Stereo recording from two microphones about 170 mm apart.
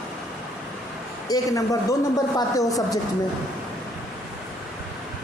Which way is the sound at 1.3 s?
20° left (ahead or behind).